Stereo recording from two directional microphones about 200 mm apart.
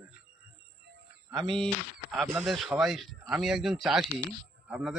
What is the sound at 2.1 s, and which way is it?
Speech, 10° right (ahead or behind).